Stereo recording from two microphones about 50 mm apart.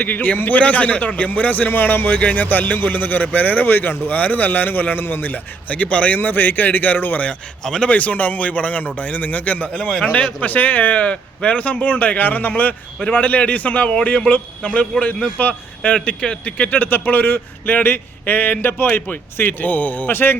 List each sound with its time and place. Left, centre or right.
0.0 s a man's voice: left
6.1 s a man's voice: left
7.6 s speech: centre
7.9 s a man's voice: left
10.4 s a man's voice: left
16.2 s speech: centre
16.6 s a man's voice: left